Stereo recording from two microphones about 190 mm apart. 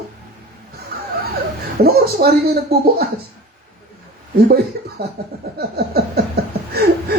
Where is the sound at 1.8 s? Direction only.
55° right (ahead or behind).